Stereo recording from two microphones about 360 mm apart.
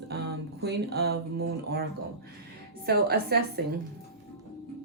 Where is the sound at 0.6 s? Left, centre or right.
Right.